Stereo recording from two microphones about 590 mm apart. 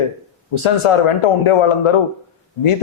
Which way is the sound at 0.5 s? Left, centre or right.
Left.